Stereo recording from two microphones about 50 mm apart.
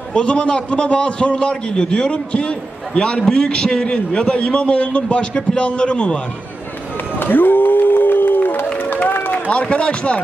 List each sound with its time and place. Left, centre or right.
0.1 s a man's voice: centre
7.2 s crowd: left
9.3 s a man's voice: left